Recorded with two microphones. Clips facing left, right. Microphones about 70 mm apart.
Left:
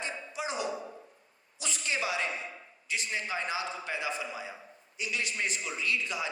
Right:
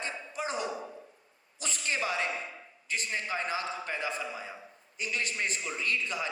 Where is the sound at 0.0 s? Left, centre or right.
Right.